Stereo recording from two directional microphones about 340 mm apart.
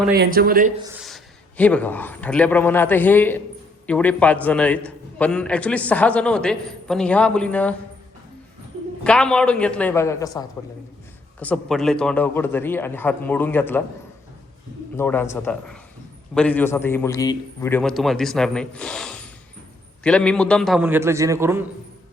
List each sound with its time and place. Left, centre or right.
0.1 s speech: right
0.8 s a man's voice: centre
9.0 s a man's voice: centre
14.9 s a man's voice: centre